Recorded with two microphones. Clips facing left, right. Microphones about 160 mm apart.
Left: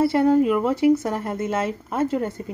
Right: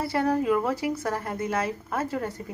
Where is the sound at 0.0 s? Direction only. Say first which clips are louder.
Left 7 dB; 25° left (ahead or behind).